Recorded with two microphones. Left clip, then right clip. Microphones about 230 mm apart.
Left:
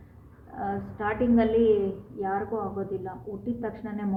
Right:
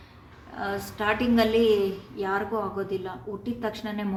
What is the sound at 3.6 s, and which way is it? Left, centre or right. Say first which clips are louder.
Speech: right 3 dB; centre.